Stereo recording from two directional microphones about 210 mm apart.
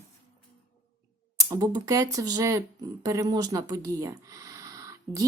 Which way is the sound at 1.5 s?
15° right (ahead or behind).